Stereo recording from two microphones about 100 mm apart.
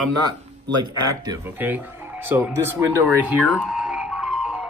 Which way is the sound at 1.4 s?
15° right (ahead or behind).